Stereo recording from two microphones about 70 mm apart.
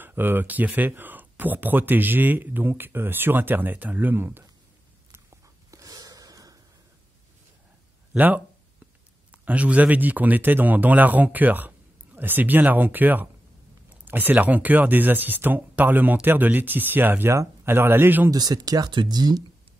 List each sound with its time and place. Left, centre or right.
0.0 s speech: right
5.1 s a sound: right
9.4 s speech: centre
18.3 s speech: right